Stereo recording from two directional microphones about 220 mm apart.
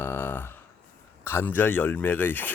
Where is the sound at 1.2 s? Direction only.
10° left (ahead or behind).